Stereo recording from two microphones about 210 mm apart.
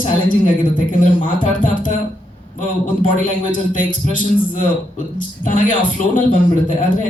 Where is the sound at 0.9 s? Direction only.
40° left (ahead or behind).